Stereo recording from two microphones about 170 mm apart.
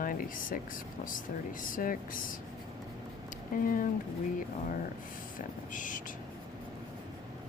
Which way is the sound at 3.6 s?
50° left (ahead or behind).